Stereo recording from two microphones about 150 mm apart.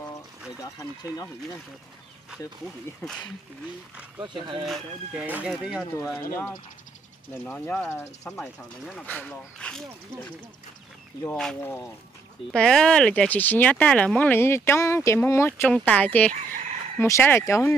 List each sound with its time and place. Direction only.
0.6 s speech: 25° left (ahead or behind)
3.0 s speech: 10° left (ahead or behind)
4.2 s speech: 30° right (ahead or behind)
5.1 s speech: 10° right (ahead or behind)
7.4 s speech: 10° left (ahead or behind)
8.4 s speech: 5° left (ahead or behind)
12.5 s speech: 5° left (ahead or behind)